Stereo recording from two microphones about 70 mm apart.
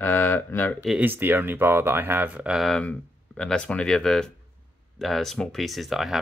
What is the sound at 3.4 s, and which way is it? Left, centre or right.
Speech, centre.